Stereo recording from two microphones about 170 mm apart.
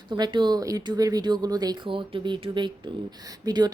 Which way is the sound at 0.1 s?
25° right (ahead or behind).